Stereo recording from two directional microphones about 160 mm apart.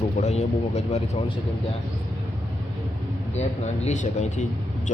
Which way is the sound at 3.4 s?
45° left (ahead or behind).